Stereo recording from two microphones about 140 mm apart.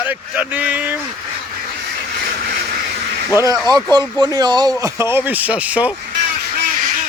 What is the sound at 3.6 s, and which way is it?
Speech, 30° right (ahead or behind).